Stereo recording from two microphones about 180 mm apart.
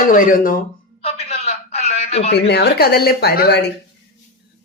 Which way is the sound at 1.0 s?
35° left (ahead or behind).